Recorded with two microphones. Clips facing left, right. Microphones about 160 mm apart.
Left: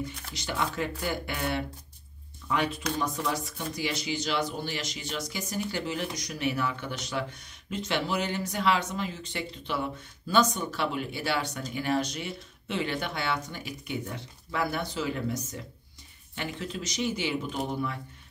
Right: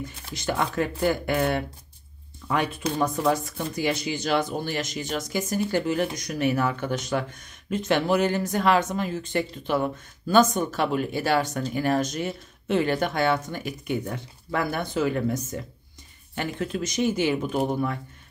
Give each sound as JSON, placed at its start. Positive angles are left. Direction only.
{"t": 0.3, "sound": "speech", "side_deg": -50}